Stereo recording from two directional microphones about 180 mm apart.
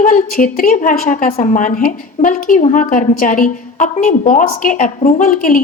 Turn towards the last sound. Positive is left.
turn(degrees=50)  # may be behind; listen again after turning